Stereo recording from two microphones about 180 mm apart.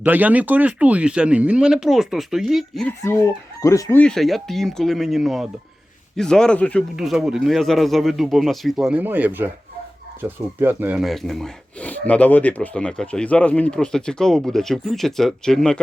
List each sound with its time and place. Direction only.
0.0 s speech: 10° right (ahead or behind)
3.0 s chicken: 15° left (ahead or behind)
4.0 s speech: centre (ahead or behind)